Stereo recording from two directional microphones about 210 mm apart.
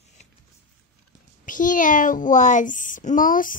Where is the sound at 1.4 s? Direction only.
40° left (ahead or behind).